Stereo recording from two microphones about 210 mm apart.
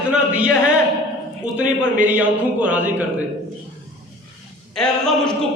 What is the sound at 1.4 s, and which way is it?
Speech, 35° right (ahead or behind).